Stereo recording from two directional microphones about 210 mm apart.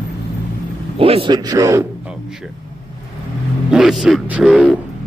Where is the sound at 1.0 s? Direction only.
25° right (ahead or behind).